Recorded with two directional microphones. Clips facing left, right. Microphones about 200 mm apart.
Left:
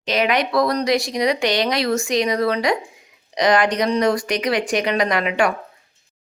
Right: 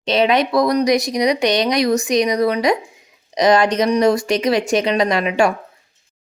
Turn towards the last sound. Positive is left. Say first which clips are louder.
# right 3 dB
turn(degrees=-25)  # may be behind; listen again after turning